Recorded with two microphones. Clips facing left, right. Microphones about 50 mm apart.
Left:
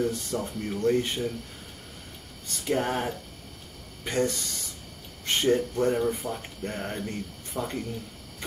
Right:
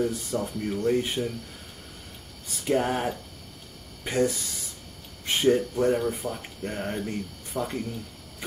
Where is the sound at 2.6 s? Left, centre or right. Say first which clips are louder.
Right 2 dB; centre.